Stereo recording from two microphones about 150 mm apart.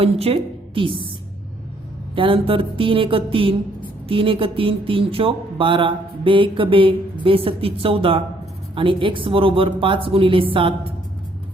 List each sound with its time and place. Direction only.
0.0 s a woman's voice: 40° right (ahead or behind)
2.1 s speech: 35° right (ahead or behind)